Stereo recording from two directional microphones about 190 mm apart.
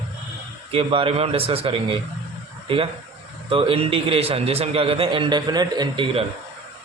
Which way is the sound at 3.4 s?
30° right (ahead or behind).